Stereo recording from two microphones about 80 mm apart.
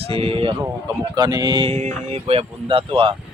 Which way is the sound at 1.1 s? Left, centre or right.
Right.